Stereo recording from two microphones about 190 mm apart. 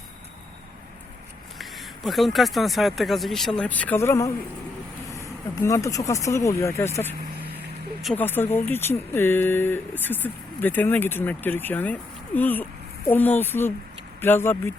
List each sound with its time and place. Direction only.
1.5 s speech: centre (ahead or behind)